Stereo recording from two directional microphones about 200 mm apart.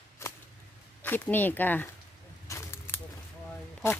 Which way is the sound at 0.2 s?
15° left (ahead or behind).